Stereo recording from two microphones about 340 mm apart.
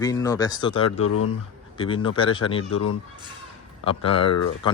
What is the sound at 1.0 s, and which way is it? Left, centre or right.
Speech, left.